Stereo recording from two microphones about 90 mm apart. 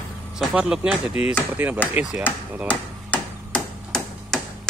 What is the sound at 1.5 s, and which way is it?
Speech, 20° right (ahead or behind).